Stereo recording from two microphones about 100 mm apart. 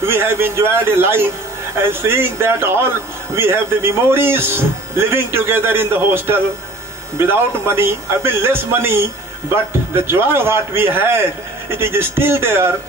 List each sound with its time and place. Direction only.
0.0 s speech: 25° right (ahead or behind)